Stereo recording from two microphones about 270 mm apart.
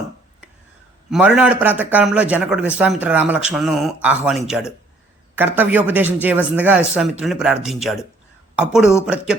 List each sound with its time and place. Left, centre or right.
1.1 s a man's voice: centre